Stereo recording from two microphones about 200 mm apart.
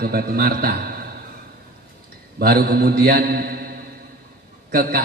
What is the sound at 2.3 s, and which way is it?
A man's voice, 50° right (ahead or behind).